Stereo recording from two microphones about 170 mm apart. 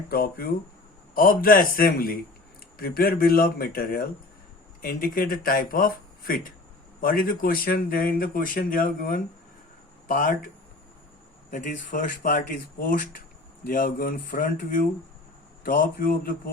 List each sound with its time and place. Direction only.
0.1 s speech: 65° left (ahead or behind)
11.5 s speech: 50° left (ahead or behind)